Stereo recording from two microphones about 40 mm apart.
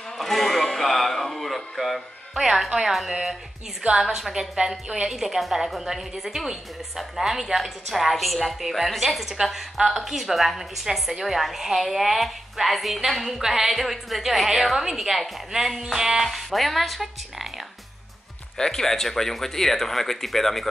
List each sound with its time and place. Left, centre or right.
0.2 s music: centre
2.9 s a woman's voice: centre
18.6 s speech: centre